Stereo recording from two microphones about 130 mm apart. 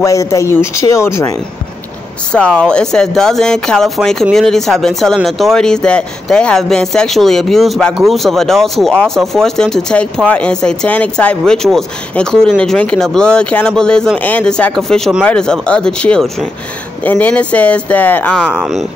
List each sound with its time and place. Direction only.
0.0 s speech: 25° left (ahead or behind)
2.3 s speech: 5° left (ahead or behind)
18.5 s speech: 5° right (ahead or behind)